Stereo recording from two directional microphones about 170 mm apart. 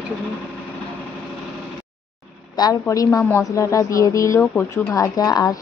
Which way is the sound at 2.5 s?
20° left (ahead or behind).